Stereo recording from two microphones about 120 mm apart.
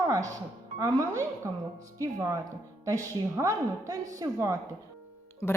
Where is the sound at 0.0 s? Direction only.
30° right (ahead or behind).